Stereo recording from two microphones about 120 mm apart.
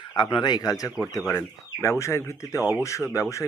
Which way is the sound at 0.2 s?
40° left (ahead or behind).